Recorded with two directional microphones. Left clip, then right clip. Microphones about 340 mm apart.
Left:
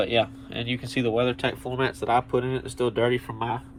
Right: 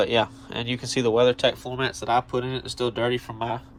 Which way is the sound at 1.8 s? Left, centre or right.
Right.